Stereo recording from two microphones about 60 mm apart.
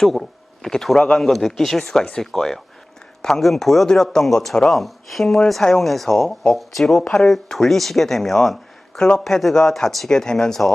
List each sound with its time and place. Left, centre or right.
0.0 s a man's voice: centre